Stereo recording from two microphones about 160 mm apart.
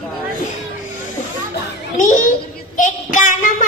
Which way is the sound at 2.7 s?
55° left (ahead or behind).